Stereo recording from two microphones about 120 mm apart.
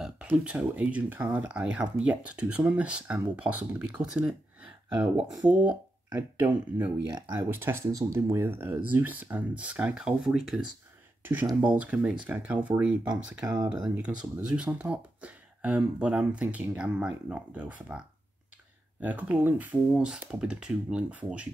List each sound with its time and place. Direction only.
0.4 s speech: 10° right (ahead or behind)
5.4 s speech: 10° right (ahead or behind)
7.1 s speech: 35° right (ahead or behind)
7.3 s speech: 20° right (ahead or behind); by 10.6 s 5° right (ahead or behind)
11.8 s speech: 10° right (ahead or behind)
13.1 s speech: 35° right (ahead or behind)
13.8 s speech: 10° right (ahead or behind)